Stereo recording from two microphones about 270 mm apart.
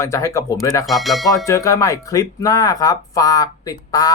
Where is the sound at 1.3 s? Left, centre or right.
Centre.